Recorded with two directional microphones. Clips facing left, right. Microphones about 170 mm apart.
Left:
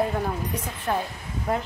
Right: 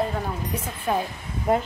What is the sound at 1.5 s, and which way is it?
Speech, 20° right (ahead or behind).